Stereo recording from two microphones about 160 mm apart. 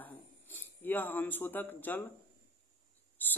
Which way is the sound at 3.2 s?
10° left (ahead or behind).